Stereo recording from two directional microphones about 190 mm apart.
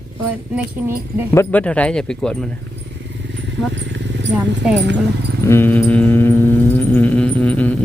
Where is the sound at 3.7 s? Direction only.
70° right (ahead or behind).